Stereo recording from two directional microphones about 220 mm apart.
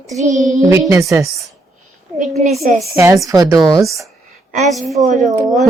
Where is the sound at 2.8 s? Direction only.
10° right (ahead or behind).